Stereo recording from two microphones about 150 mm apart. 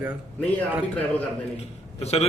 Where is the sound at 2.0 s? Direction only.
45° left (ahead or behind).